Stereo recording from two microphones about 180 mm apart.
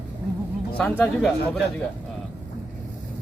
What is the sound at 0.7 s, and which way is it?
Speech, 5° left (ahead or behind).